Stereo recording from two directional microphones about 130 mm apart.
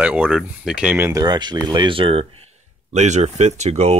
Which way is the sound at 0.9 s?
20° right (ahead or behind).